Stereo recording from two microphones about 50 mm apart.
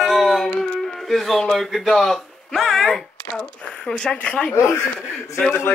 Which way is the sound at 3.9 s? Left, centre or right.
Centre.